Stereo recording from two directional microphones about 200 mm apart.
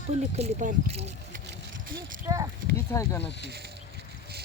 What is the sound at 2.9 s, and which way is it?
Speech, 15° left (ahead or behind).